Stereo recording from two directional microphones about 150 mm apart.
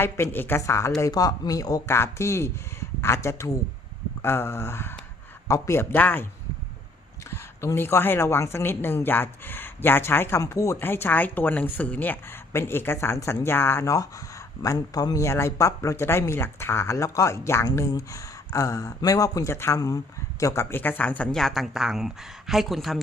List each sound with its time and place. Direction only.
0.0 s a woman's voice: 15° left (ahead or behind)
7.3 s a woman's voice: 15° left (ahead or behind); by 23.0 s centre (ahead or behind)